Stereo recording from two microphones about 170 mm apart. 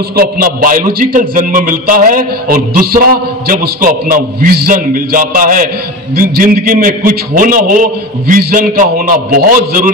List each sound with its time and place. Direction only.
0.1 s a man's voice: 60° right (ahead or behind)